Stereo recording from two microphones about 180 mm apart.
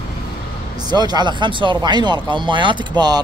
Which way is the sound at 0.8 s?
25° right (ahead or behind).